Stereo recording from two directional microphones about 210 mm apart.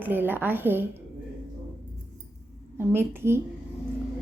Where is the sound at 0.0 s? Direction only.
10° right (ahead or behind).